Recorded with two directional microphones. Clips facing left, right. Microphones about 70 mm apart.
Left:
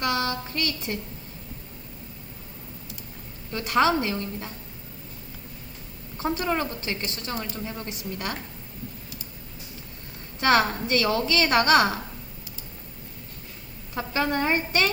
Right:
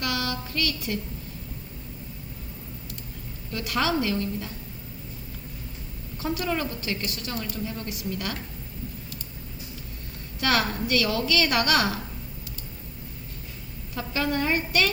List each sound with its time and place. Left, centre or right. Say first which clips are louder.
0.0 s a sound: left 3 dB; left
3.5 s a woman's voice: left 4 dB; left
6.1 s a woman's voice: left 2 dB; left
10.4 s a woman's voice: left 4 dB; left
13.9 s a woman's voice: left 2 dB; left